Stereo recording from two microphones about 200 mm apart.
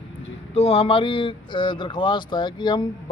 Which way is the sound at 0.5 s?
30° left (ahead or behind).